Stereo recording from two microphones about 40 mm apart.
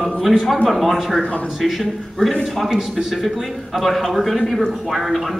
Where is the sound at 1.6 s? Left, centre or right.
Centre.